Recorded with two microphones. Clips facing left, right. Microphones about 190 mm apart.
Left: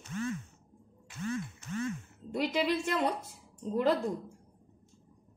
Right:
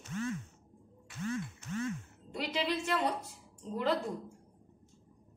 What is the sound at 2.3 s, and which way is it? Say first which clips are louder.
Speech: left 5 dB; 50° left (ahead or behind).